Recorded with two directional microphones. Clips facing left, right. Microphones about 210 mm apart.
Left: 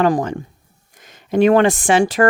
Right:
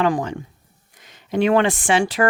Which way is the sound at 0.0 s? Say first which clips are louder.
Left 4 dB; 40° left (ahead or behind).